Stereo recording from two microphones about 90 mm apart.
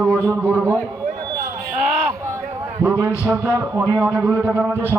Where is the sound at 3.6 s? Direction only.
30° right (ahead or behind).